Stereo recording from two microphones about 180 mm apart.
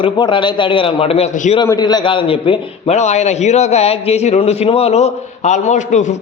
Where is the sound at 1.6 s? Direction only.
20° left (ahead or behind).